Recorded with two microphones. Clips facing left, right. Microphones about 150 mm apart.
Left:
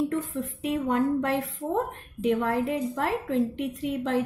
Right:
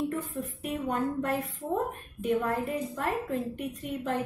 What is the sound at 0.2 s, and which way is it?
A woman's voice, 90° left.